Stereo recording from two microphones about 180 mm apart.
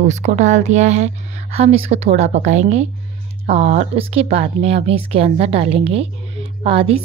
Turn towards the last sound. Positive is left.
turn(degrees=-30)  # may be behind; listen again after turning